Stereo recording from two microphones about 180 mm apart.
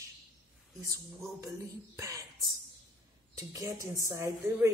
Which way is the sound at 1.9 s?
15° right (ahead or behind).